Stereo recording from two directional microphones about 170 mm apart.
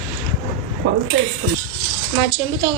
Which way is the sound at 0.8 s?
65° right (ahead or behind).